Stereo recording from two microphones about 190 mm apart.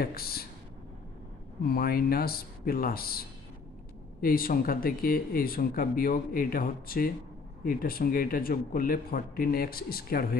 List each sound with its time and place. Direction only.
0.0 s speech: 55° left (ahead or behind)
1.7 s speech: 50° left (ahead or behind)